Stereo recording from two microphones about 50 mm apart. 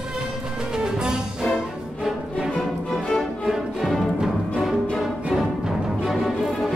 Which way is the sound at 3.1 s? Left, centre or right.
Centre.